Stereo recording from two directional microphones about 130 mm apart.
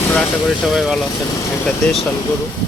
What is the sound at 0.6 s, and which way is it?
Speech, centre (ahead or behind).